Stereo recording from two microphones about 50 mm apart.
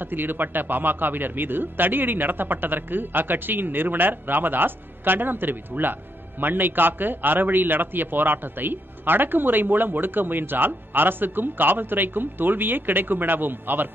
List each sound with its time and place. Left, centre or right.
0.0 s a man's voice: right